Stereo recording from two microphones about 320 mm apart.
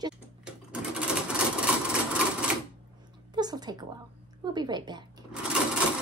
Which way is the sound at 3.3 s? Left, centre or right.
Centre.